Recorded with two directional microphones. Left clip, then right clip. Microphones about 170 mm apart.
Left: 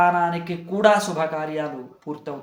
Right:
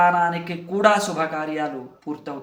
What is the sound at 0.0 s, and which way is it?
Speech, 15° left (ahead or behind).